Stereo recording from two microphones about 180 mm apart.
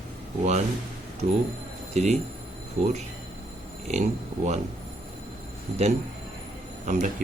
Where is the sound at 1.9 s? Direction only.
40° right (ahead or behind).